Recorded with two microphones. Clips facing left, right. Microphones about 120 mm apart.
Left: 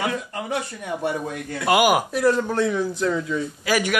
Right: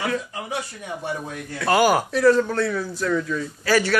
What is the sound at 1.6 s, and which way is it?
Speech, 15° left (ahead or behind).